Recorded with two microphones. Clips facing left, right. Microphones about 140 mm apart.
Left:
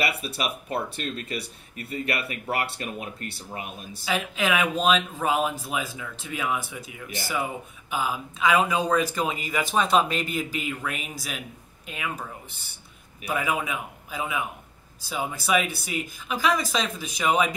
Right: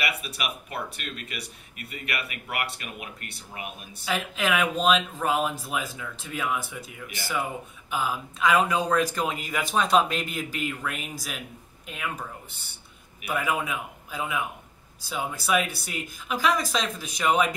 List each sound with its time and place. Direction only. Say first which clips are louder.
0.0 s speech: left 4 dB; 35° left (ahead or behind)
4.0 s speech: left 1 dB; centre (ahead or behind)
7.9 s speech: left 1 dB; 5° left (ahead or behind)
13.3 s speech: left 1 dB; 5° left (ahead or behind)